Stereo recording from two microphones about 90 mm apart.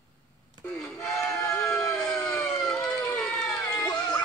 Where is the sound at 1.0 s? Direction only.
35° left (ahead or behind).